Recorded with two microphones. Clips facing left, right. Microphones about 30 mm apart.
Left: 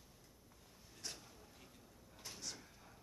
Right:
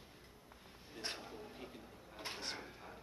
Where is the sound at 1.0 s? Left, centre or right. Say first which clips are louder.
Right 7 dB; right.